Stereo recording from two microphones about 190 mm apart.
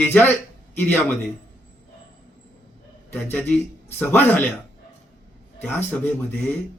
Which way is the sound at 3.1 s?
10° left (ahead or behind).